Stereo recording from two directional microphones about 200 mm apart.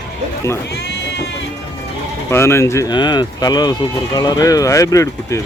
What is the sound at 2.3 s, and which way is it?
Speech, 15° left (ahead or behind).